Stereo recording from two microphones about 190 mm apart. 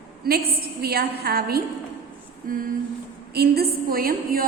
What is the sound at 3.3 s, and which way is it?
A woman's voice, 55° right (ahead or behind).